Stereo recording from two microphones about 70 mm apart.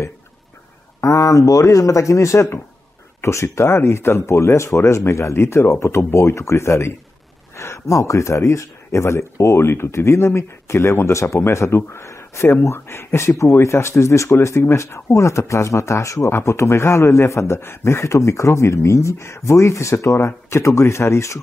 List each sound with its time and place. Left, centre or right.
1.0 s speech: left
16.3 s speech: left